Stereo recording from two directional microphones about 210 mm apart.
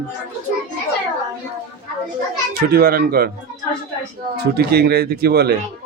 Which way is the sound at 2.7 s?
45° right (ahead or behind).